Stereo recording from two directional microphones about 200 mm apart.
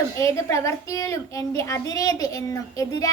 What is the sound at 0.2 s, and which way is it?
A woman's voice, 15° left (ahead or behind).